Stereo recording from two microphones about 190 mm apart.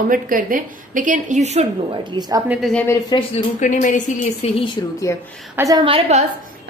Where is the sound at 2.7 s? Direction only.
10° left (ahead or behind).